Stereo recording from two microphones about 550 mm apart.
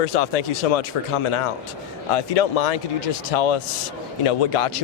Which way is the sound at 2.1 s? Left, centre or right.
Left.